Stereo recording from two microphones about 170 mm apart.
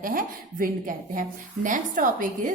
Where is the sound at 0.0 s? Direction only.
55° right (ahead or behind).